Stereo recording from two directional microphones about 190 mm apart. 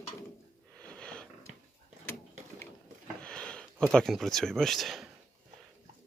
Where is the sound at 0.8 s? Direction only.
5° left (ahead or behind).